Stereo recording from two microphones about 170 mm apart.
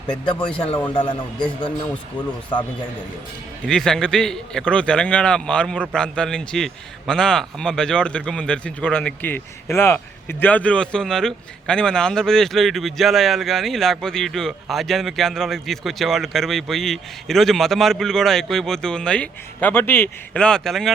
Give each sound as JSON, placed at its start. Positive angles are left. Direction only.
{"t": 0.9, "sound": "a man's voice", "side_deg": 30}
{"t": 2.2, "sound": "speech", "side_deg": 10}
{"t": 3.7, "sound": "a man's voice", "side_deg": 5}